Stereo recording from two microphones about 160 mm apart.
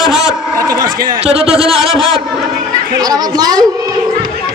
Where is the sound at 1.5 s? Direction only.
40° right (ahead or behind).